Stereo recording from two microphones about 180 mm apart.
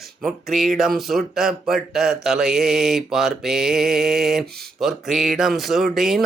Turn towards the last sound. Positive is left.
turn(degrees=0)  # may be behind; listen again after turning